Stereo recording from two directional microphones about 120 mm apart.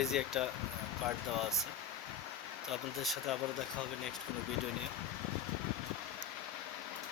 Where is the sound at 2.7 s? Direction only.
Centre (ahead or behind).